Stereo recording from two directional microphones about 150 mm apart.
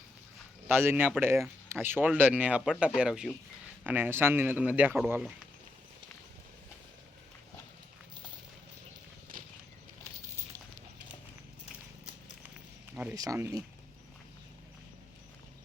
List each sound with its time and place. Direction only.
0.7 s speech: 15° right (ahead or behind)
9.3 s horse: 70° right (ahead or behind)
13.1 s speech: 20° right (ahead or behind)